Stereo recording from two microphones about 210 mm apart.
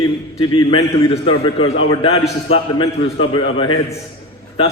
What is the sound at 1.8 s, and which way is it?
A man's voice, 25° left (ahead or behind).